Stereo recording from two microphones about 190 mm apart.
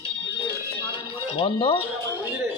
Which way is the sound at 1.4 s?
30° left (ahead or behind).